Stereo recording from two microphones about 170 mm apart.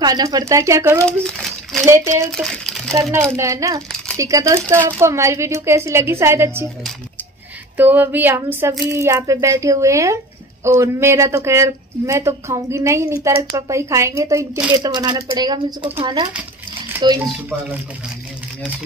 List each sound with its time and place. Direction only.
0.0 s speech: 20° right (ahead or behind)
1.2 s a child's voice: centre (ahead or behind)
1.8 s speech: 15° right (ahead or behind)
2.2 s speech: 5° left (ahead or behind)
2.9 s speech: 15° right (ahead or behind)
7.7 s speech: 10° right (ahead or behind)